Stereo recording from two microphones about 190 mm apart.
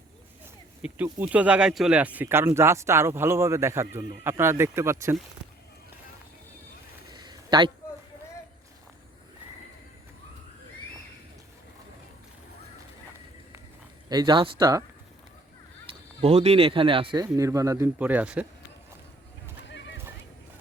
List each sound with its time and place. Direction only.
0.8 s speech: 10° right (ahead or behind)
7.1 s a sound: 20° right (ahead or behind)
14.1 s speech: 20° right (ahead or behind)
15.9 s speech: 35° right (ahead or behind); by 18.4 s 5° right (ahead or behind)
19.6 s horse: 70° left (ahead or behind)